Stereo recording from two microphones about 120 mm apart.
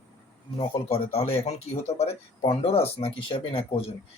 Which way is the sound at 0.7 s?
55° left (ahead or behind).